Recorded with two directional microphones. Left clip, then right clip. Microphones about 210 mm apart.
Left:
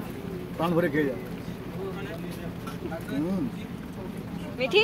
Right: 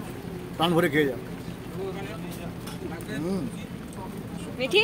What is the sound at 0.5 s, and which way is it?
Speech, 40° right (ahead or behind).